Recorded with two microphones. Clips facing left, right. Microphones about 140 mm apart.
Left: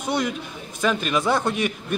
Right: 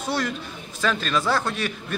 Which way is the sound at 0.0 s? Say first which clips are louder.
Left 2 dB; 15° left (ahead or behind).